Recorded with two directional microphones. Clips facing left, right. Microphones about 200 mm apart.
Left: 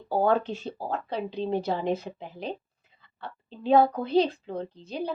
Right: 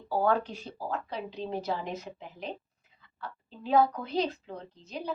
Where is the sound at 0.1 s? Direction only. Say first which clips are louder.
Left 3 dB; 25° left (ahead or behind).